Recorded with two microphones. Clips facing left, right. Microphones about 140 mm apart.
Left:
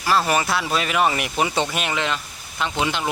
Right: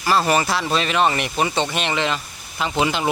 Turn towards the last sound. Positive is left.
turn(degrees=-5)  # may be behind; listen again after turning